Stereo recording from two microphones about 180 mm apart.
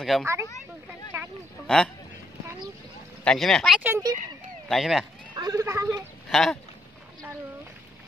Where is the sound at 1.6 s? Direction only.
5° left (ahead or behind).